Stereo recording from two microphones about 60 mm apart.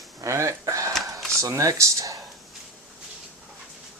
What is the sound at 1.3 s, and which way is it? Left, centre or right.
Speech, right.